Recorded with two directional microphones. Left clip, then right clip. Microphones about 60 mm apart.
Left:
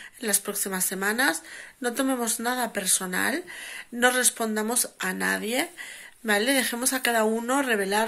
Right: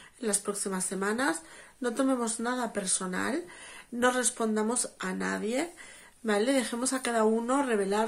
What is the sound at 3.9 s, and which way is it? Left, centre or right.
Speech, right.